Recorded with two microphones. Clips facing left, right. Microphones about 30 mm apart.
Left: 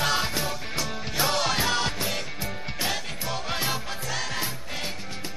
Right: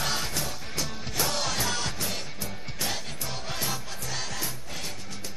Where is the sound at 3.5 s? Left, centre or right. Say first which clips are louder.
Left 4 dB; left.